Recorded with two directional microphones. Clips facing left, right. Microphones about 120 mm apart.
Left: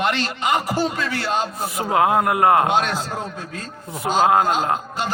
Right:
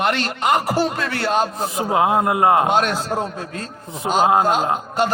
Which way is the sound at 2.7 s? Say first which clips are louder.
Right 2 dB; 50° right (ahead or behind).